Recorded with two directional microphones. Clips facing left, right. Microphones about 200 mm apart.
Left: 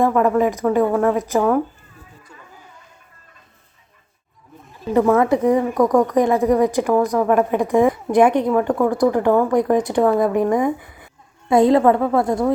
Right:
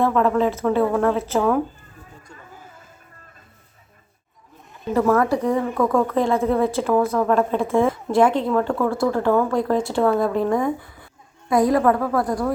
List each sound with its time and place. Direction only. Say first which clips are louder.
0.0 s speech: left 2 dB; 10° left (ahead or behind)
4.9 s speech: left 3 dB; 20° left (ahead or behind)